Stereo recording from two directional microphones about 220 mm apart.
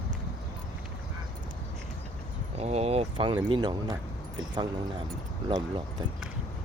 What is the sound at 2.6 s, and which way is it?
Speech, 30° right (ahead or behind).